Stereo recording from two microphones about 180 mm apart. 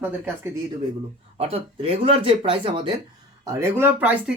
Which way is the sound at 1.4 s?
35° right (ahead or behind).